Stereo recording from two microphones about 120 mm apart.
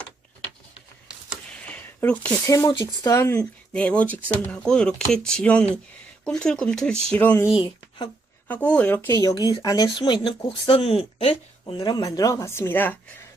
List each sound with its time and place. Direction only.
1.6 s a sound: 10° left (ahead or behind)
2.5 s speech: 30° left (ahead or behind)
3.7 s speech: 10° left (ahead or behind)
7.5 s speech: 45° left (ahead or behind)
8.4 s speech: 10° left (ahead or behind)
9.3 s speech: 35° left (ahead or behind); by 11.3 s 55° left (ahead or behind)
11.6 s speech: 35° left (ahead or behind); by 13.0 s 15° left (ahead or behind)